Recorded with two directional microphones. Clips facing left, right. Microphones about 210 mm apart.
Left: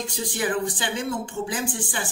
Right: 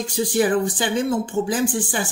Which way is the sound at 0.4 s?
35° right (ahead or behind).